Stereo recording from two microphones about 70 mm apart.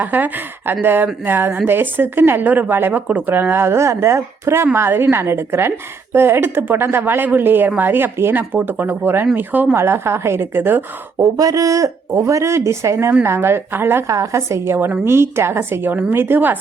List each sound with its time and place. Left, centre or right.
0.0 s speech: right
9.7 s speech: right
11.3 s speech: right
14.1 s speech: right